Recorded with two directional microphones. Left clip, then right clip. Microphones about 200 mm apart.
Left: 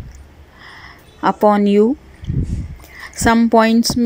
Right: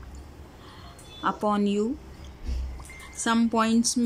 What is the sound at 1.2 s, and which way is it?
Speech, 20° left (ahead or behind).